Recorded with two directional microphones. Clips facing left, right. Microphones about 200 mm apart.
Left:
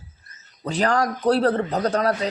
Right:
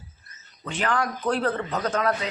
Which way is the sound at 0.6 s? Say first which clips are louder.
Left 5 dB; 40° left (ahead or behind).